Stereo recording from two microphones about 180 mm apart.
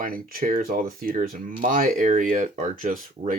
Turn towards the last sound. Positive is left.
turn(degrees=-50)  # may be behind; listen again after turning